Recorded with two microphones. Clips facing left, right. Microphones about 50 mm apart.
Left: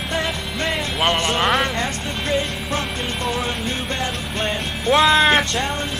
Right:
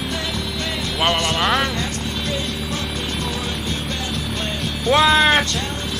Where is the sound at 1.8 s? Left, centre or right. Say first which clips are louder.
Left 1 dB; left.